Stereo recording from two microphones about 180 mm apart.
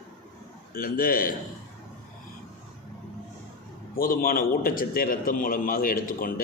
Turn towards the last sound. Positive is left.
turn(degrees=50)  # may be behind; listen again after turning